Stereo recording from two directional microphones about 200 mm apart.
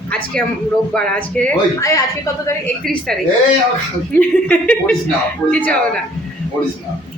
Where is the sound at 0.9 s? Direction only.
5° left (ahead or behind).